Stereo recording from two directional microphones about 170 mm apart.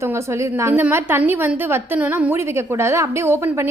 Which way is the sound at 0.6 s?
15° right (ahead or behind).